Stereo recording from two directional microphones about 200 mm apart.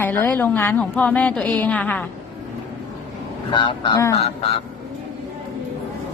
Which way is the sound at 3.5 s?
25° left (ahead or behind).